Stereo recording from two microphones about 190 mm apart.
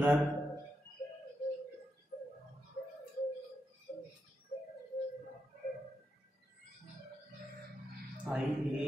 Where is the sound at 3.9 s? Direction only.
45° left (ahead or behind).